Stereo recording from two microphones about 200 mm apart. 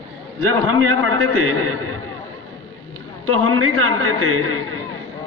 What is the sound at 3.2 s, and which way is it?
A man's voice, 90° right.